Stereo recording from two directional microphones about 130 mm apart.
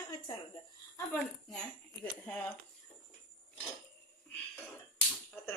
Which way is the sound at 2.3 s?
15° left (ahead or behind).